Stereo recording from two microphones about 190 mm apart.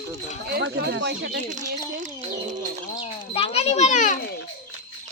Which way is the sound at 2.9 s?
30° left (ahead or behind).